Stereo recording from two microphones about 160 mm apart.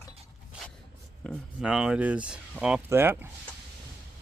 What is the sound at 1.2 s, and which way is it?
Speech, 5° right (ahead or behind).